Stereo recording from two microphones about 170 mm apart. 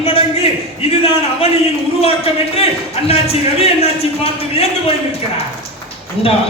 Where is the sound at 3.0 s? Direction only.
35° left (ahead or behind).